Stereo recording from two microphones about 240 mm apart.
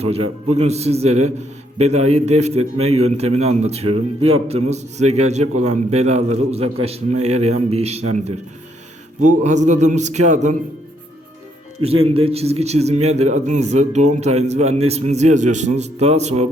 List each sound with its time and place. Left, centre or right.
0.0 s a man's voice: right
11.8 s a man's voice: right